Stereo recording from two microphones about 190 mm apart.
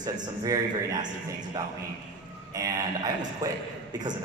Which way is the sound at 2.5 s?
20° right (ahead or behind).